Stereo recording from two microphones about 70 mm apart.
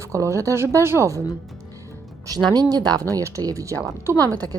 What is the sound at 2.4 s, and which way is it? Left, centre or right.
Speech, right.